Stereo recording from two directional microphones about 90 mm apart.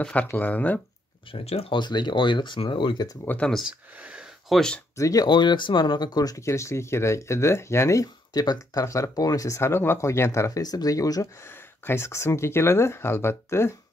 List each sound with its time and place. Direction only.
0.0 s speech: 15° left (ahead or behind)
1.3 s speech: 85° left; by 3.1 s 65° left (ahead or behind)
3.3 s speech: 15° left (ahead or behind)
3.6 s speech: 10° right (ahead or behind)
4.5 s speech: 5° left (ahead or behind)
4.9 s speech: 40° left (ahead or behind)
11.8 s speech: 30° left (ahead or behind)